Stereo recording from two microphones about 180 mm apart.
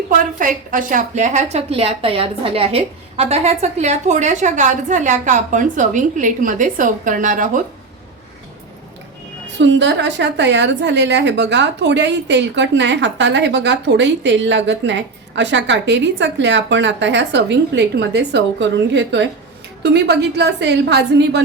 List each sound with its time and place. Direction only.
0.1 s a woman's voice: 50° right (ahead or behind)
9.6 s a woman's voice: 75° right (ahead or behind)
19.8 s a woman's voice: 65° right (ahead or behind)